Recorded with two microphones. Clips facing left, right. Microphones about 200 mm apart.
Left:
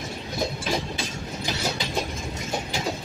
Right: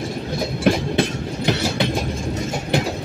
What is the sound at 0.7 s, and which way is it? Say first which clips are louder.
Train: right 10 dB; 65° right (ahead or behind).